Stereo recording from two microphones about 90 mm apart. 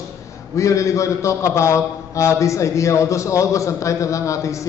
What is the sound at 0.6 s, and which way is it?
A man's voice, 35° left (ahead or behind).